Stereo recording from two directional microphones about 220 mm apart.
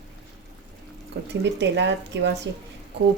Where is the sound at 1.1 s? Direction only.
50° right (ahead or behind).